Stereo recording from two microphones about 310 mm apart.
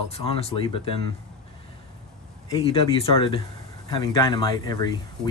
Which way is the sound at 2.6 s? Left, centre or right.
Centre.